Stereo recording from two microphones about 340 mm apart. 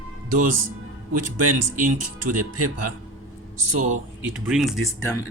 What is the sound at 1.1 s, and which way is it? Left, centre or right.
Speech, right.